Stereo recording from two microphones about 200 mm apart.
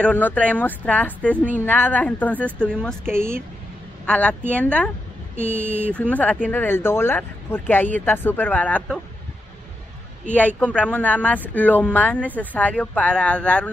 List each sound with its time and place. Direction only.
0.0 s a woman's voice: 5° left (ahead or behind)
3.1 s speech: 10° right (ahead or behind)
4.0 s a woman's voice: 5° left (ahead or behind)
5.3 s speech: 10° right (ahead or behind)
5.9 s a woman's voice: 5° left (ahead or behind)
10.3 s a woman's voice: 5° left (ahead or behind)